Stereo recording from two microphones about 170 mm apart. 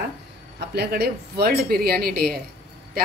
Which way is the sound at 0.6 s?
70° right (ahead or behind).